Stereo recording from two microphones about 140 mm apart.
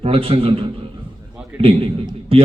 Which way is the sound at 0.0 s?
40° right (ahead or behind).